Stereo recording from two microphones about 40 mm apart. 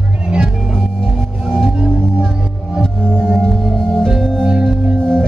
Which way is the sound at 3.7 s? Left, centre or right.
Centre.